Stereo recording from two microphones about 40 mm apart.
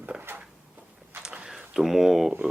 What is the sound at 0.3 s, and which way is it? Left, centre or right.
Drawer open or close, right.